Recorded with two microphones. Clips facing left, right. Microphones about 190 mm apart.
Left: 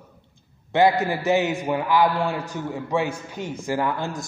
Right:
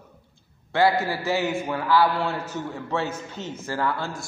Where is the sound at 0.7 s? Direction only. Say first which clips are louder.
Left 2 dB; 20° left (ahead or behind).